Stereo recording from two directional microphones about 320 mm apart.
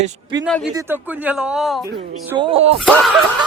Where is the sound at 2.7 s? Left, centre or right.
Centre.